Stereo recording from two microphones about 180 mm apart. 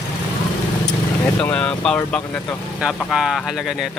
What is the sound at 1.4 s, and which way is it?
Speech, 5° left (ahead or behind).